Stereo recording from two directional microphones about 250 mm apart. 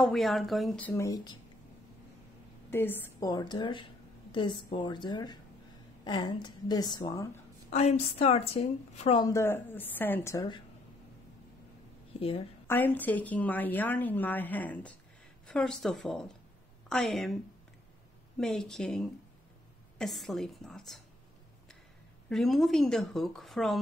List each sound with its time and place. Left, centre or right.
0.0 s a woman's voice: centre
2.7 s a woman's voice: centre
7.7 s a woman's voice: left
12.6 s a woman's voice: centre
18.4 s a woman's voice: centre
22.3 s a woman's voice: centre